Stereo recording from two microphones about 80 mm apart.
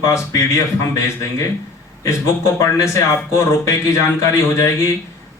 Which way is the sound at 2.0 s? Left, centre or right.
Left.